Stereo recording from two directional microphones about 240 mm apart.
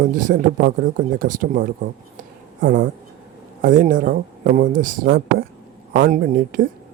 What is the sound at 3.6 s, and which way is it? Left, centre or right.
Speech, right.